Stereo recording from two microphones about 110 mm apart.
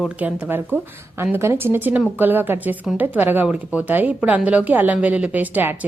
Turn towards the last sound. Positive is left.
turn(degrees=-15)  # may be behind; listen again after turning